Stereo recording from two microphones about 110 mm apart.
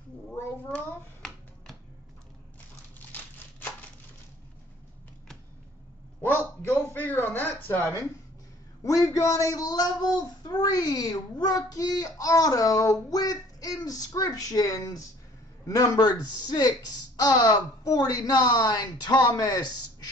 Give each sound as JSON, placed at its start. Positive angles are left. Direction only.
{"t": 0.3, "sound": "finger snapping", "side_deg": 10}
{"t": 3.1, "sound": "crumpling", "side_deg": 15}
{"t": 6.2, "sound": "a sound", "side_deg": 15}
{"t": 8.8, "sound": "speech", "side_deg": 30}